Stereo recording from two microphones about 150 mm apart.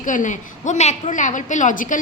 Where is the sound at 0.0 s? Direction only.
60° left (ahead or behind).